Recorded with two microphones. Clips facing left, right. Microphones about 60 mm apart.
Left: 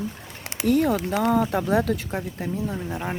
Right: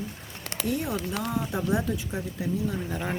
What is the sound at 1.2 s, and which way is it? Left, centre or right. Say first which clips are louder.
Speech: left 8 dB; left.